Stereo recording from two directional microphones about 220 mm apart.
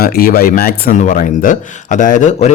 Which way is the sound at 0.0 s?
40° left (ahead or behind).